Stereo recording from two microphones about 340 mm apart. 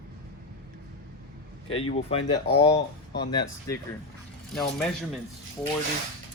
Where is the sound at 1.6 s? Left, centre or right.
Centre.